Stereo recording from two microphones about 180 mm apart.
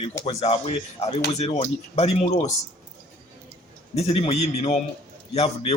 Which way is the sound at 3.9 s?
30° left (ahead or behind).